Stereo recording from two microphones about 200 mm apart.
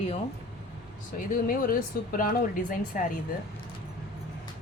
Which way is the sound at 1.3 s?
45° left (ahead or behind).